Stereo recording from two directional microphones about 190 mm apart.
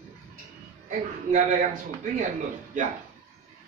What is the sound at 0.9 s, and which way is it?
Speech, 40° right (ahead or behind).